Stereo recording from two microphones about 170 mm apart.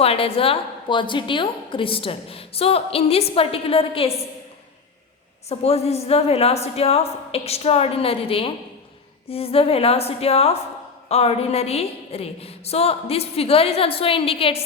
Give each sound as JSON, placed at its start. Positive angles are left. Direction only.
{"t": 0.0, "sound": "a woman's voice", "side_deg": 35}
{"t": 5.5, "sound": "a woman's voice", "side_deg": 35}